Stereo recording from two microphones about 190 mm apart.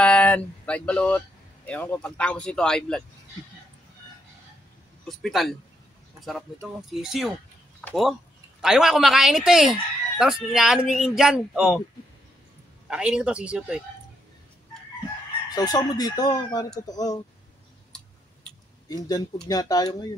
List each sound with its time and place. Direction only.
0.0 s speech: 5° left (ahead or behind)
5.0 s speech: centre (ahead or behind)
6.6 s speech: centre (ahead or behind)
12.8 s speech: 5° right (ahead or behind)
15.5 s speech: 20° left (ahead or behind)
18.9 s speech: 20° left (ahead or behind)